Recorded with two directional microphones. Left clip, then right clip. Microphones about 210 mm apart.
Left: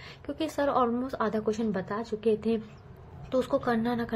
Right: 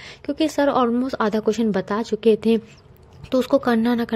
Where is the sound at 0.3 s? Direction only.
40° right (ahead or behind).